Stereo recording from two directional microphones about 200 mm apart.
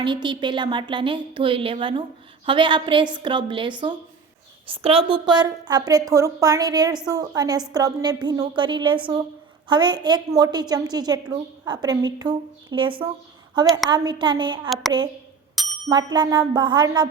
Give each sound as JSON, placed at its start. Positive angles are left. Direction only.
{"t": 0.0, "sound": "a woman's voice", "side_deg": -25}
{"t": 15.9, "sound": "a woman's voice", "side_deg": -20}